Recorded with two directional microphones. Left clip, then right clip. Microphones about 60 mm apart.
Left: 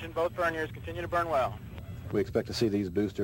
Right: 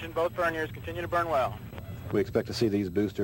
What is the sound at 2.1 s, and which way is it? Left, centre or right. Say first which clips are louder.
Speech: right 2 dB; left.